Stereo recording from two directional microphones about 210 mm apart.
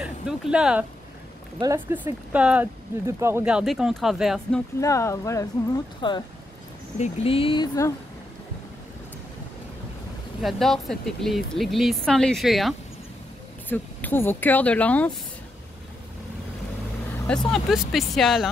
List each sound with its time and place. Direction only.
0.0 s speech: 5° right (ahead or behind)
1.6 s speech: 15° right (ahead or behind)
4.7 s speech: 15° left (ahead or behind)
10.4 s speech: centre (ahead or behind)
17.3 s speech: centre (ahead or behind)